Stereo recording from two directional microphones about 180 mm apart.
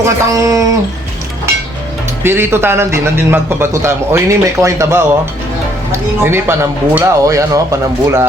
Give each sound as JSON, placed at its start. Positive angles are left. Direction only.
{"t": 0.0, "sound": "a man's voice", "side_deg": -20}
{"t": 2.2, "sound": "a man's voice", "side_deg": -10}
{"t": 6.2, "sound": "a man's voice", "side_deg": -15}